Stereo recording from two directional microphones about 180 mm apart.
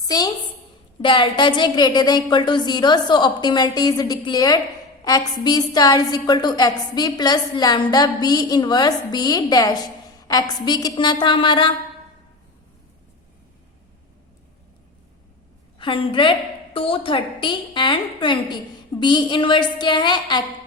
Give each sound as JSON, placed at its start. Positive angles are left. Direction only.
{"t": 0.0, "sound": "a woman's voice", "side_deg": 20}
{"t": 15.8, "sound": "a woman's voice", "side_deg": 30}